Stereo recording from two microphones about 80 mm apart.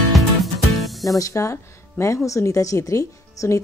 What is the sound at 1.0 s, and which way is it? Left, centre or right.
A woman's voice, left.